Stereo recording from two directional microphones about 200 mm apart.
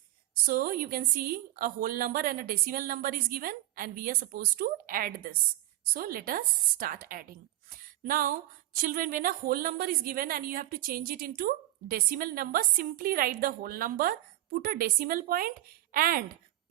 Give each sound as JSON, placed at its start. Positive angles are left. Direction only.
{"t": 0.4, "sound": "speech", "side_deg": -45}